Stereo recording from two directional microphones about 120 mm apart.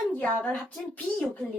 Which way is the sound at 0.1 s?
10° left (ahead or behind).